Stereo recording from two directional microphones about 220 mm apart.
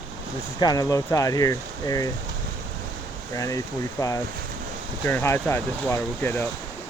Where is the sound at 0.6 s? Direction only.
15° left (ahead or behind).